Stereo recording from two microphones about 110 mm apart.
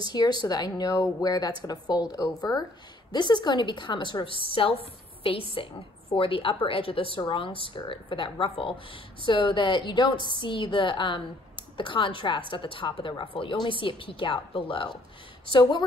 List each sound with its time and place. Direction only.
0.0 s a woman's voice: 40° left (ahead or behind)
5.5 s a woman's voice: 55° left (ahead or behind)